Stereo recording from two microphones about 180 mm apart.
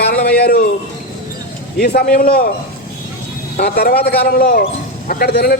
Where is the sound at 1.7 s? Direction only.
60° left (ahead or behind).